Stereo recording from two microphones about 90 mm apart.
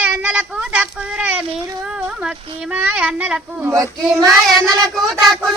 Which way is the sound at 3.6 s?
30° right (ahead or behind).